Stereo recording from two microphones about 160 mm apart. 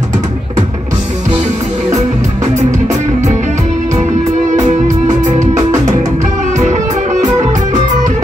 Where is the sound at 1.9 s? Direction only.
50° right (ahead or behind).